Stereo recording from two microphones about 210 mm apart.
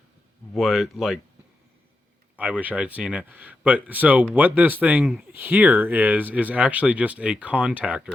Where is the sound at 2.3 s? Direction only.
5° right (ahead or behind).